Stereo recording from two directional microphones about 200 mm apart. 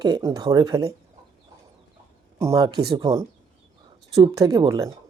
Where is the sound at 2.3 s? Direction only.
15° right (ahead or behind).